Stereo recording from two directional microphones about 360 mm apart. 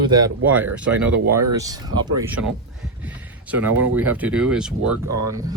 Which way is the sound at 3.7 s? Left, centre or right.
Right.